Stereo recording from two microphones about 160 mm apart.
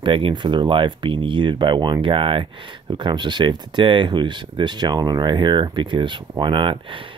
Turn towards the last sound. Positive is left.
turn(degrees=-30)  # may be behind; listen again after turning